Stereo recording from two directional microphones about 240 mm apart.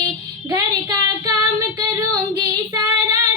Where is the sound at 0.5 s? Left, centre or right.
Centre.